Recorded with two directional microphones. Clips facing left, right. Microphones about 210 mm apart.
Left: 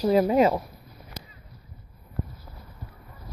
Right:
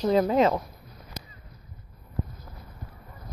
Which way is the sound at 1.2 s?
20° right (ahead or behind).